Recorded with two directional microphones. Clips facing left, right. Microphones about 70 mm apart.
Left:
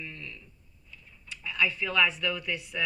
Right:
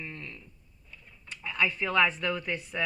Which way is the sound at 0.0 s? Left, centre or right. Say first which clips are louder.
Right 1 dB; right.